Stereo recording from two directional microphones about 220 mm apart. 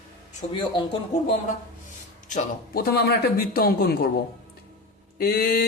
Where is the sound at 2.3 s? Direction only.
40° left (ahead or behind).